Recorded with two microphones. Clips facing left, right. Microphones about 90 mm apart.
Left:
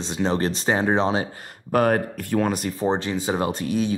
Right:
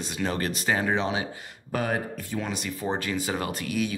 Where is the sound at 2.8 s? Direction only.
30° left (ahead or behind).